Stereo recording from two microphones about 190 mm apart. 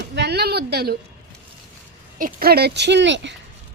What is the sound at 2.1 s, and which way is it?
A woman's voice, 50° right (ahead or behind).